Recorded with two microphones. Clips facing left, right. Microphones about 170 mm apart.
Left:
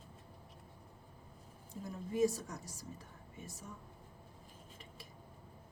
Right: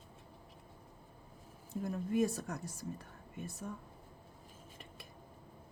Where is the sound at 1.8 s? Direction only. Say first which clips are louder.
Right 1 dB; 60° right (ahead or behind).